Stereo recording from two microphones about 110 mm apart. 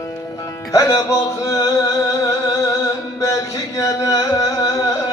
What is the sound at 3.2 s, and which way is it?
Music, 30° left (ahead or behind).